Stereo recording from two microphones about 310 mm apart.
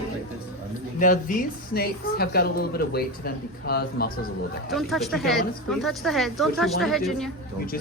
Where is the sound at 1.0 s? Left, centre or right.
Left.